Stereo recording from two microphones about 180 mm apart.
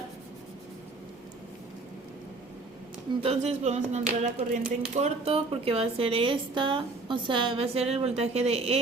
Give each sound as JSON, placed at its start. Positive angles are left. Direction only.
{"t": 3.2, "sound": "speech", "side_deg": -35}